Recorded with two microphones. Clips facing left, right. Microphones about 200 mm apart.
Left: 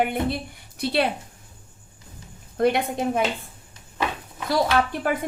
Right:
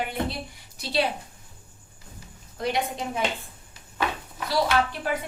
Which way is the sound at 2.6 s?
55° left (ahead or behind).